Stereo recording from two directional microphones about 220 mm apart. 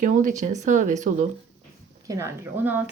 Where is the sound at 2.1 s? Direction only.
15° right (ahead or behind).